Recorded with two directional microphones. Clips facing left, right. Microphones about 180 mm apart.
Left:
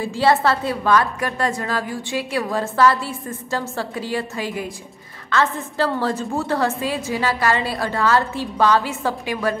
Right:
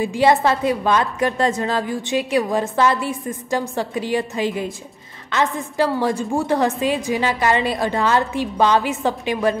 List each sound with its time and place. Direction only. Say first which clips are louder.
0.0 s a woman's voice: right 2 dB; 15° right (ahead or behind)